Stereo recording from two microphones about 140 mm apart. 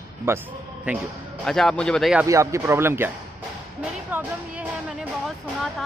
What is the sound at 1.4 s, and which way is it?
Speech, centre (ahead or behind).